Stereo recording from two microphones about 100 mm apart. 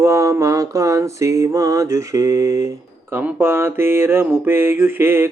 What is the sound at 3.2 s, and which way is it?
Speech, 20° right (ahead or behind).